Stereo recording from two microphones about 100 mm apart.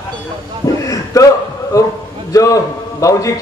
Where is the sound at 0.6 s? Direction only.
40° left (ahead or behind).